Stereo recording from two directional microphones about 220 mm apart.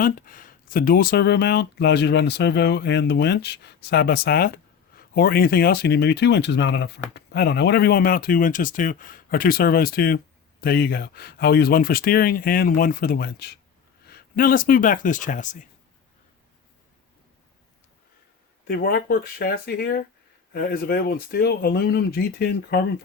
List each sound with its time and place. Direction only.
0.0 s speech: 40° left (ahead or behind)
18.7 s speech: 45° left (ahead or behind)